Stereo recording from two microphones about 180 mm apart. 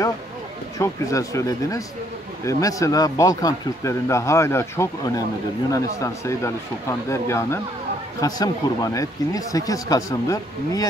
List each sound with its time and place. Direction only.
0.7 s speech: 20° left (ahead or behind)